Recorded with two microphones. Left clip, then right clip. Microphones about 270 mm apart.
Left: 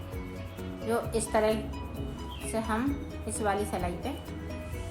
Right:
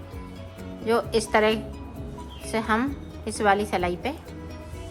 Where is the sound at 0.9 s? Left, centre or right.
Right.